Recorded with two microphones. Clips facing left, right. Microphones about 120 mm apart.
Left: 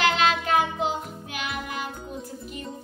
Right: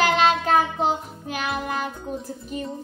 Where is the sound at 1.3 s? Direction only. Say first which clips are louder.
Right 7 dB; 40° right (ahead or behind).